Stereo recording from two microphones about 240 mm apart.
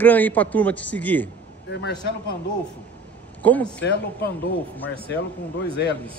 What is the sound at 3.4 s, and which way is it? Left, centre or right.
Speech, centre.